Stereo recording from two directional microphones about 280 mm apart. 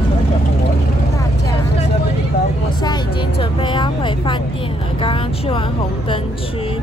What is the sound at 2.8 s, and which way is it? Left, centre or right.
A woman's voice, centre.